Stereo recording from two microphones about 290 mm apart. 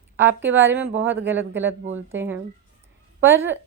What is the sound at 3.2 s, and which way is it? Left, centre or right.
Speech, centre.